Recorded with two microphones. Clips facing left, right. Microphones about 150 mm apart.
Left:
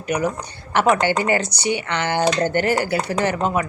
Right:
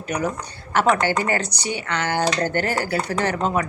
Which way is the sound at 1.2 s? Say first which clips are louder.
Left 3 dB; 15° left (ahead or behind).